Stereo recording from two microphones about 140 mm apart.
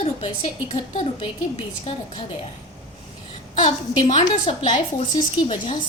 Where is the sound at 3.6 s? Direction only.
45° left (ahead or behind).